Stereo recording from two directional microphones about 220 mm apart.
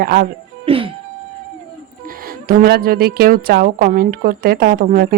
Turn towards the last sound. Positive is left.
turn(degrees=-40)  # may be behind; listen again after turning